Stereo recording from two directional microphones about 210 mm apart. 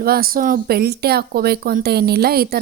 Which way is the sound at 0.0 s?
45° right (ahead or behind).